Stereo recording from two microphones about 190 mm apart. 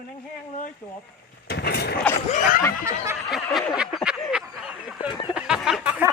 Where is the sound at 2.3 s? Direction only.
40° left (ahead or behind).